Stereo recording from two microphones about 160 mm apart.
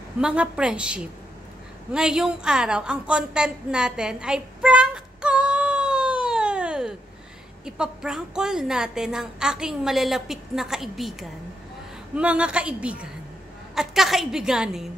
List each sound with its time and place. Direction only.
0.2 s a woman's voice: 5° right (ahead or behind)
1.9 s a sound: 5° right (ahead or behind)
7.6 s a woman's voice: 5° right (ahead or behind)